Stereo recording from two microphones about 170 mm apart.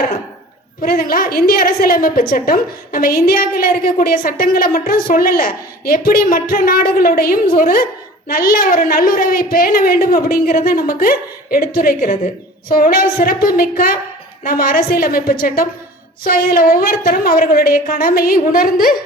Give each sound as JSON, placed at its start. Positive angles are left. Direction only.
{"t": 0.8, "sound": "a woman's voice", "side_deg": 60}